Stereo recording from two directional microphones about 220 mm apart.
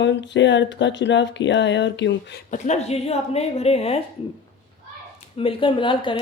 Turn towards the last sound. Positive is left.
turn(degrees=20)  # may be behind; listen again after turning